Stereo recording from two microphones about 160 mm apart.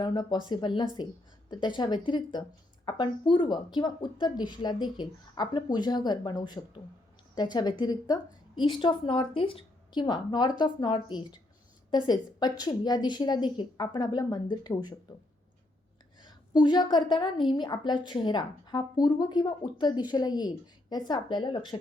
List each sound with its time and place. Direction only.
0.0 s a woman's voice: 25° left (ahead or behind)
16.2 s a woman's voice: 25° left (ahead or behind)